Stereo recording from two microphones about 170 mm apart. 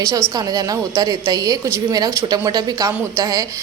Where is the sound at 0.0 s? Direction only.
20° right (ahead or behind).